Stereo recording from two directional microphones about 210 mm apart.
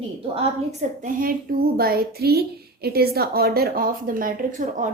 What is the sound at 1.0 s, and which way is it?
Speech, 40° right (ahead or behind).